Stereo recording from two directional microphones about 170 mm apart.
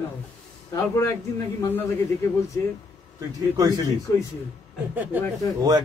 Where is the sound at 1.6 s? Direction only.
10° left (ahead or behind).